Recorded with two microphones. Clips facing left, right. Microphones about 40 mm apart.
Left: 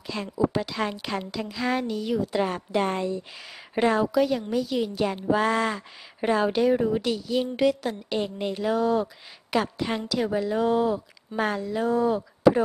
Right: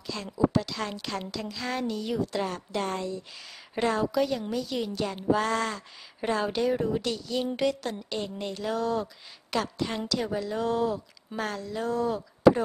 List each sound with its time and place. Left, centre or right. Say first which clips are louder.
0.1 s a woman's voice: left 1 dB; centre
2.3 s a woman's voice: left 5 dB; centre